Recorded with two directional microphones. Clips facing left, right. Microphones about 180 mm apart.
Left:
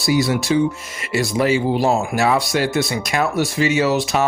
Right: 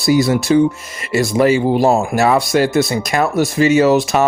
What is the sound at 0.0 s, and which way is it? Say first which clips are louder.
Speech: right 4 dB; 50° right (ahead or behind).